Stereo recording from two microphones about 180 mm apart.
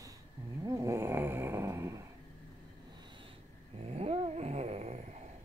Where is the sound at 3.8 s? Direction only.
35° right (ahead or behind).